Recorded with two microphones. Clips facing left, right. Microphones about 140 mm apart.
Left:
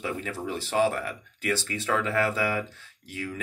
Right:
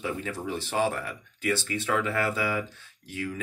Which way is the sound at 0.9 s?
25° right (ahead or behind).